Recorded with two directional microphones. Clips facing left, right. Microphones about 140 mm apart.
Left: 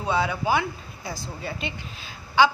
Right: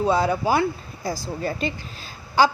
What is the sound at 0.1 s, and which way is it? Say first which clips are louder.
A woman's voice: left 1 dB; 40° right (ahead or behind).